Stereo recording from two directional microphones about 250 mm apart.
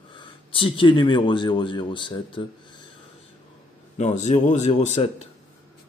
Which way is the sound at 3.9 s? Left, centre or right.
Left.